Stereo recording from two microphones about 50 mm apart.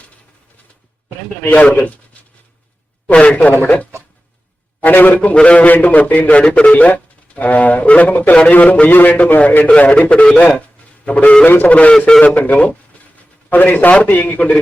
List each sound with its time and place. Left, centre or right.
3.1 s speech: left
3.5 s a man's voice: left
4.8 s a man's voice: left
5.6 s a man's voice: left
11.4 s a man's voice: left